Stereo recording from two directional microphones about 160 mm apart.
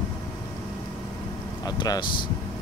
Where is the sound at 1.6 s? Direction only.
25° left (ahead or behind).